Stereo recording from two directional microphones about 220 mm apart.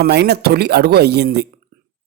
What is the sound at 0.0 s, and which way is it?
Speech, 50° right (ahead or behind).